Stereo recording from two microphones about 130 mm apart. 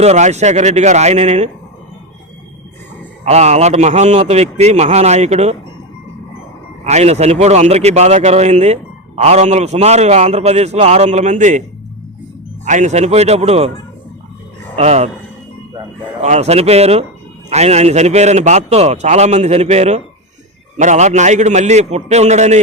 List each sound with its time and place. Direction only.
0.0 s a man's voice: 60° right (ahead or behind)
3.2 s a man's voice: 60° right (ahead or behind)
6.8 s a man's voice: 60° right (ahead or behind)
12.6 s a man's voice: 70° right (ahead or behind); by 13.7 s 50° right (ahead or behind)
14.8 s a man's voice: 55° right (ahead or behind)
16.2 s a man's voice: 60° right (ahead or behind)